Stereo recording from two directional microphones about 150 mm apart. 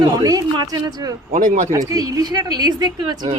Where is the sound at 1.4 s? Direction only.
55° right (ahead or behind).